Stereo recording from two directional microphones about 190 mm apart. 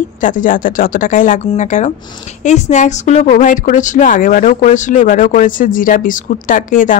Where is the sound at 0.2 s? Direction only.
45° left (ahead or behind).